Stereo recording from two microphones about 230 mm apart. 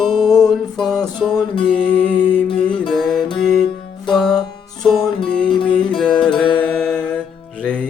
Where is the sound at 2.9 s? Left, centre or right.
Centre.